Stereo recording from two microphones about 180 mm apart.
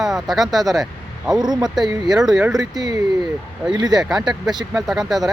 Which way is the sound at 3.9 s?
Centre (ahead or behind).